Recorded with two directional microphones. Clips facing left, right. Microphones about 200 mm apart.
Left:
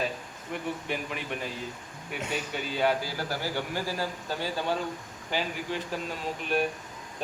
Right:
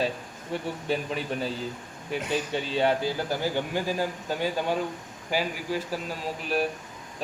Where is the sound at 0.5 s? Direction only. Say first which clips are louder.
Right 4 dB; 30° right (ahead or behind).